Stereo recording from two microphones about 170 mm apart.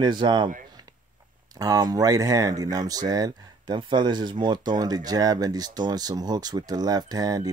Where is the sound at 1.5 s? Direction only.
20° right (ahead or behind).